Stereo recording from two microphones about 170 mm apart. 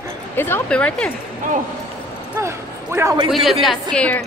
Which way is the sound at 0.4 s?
15° left (ahead or behind).